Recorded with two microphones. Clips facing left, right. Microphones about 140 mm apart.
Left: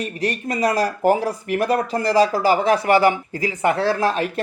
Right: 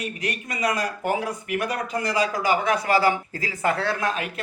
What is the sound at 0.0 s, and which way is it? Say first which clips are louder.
Speech: left 6 dB; 35° left (ahead or behind).